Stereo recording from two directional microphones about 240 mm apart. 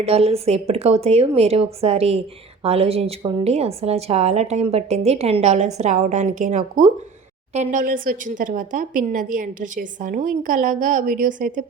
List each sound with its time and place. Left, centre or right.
0.0 s a woman's voice: right